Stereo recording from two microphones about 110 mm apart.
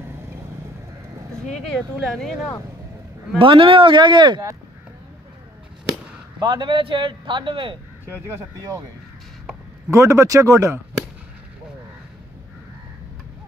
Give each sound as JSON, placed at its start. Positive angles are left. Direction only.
{"t": 1.5, "sound": "speech", "side_deg": 0}
{"t": 3.3, "sound": "a man's voice", "side_deg": -50}
{"t": 6.4, "sound": "a man's voice", "side_deg": -50}
{"t": 8.3, "sound": "speech", "side_deg": -30}
{"t": 9.8, "sound": "speech", "side_deg": -30}